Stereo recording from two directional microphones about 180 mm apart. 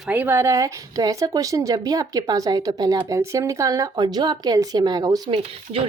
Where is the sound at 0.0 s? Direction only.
10° right (ahead or behind).